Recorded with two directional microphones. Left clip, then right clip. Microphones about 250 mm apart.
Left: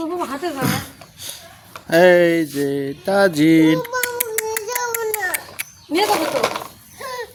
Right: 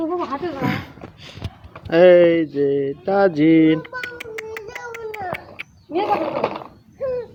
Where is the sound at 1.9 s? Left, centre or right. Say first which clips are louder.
Right 1 dB; centre.